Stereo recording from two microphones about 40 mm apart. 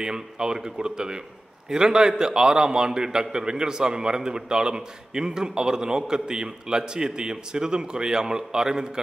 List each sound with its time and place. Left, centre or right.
0.0 s a man's voice: centre